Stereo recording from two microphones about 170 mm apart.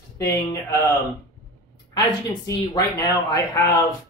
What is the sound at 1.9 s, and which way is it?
Speech, 25° left (ahead or behind).